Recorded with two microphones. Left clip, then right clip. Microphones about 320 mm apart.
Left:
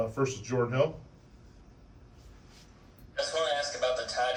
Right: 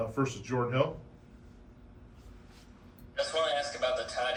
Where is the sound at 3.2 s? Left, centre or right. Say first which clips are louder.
Even; left.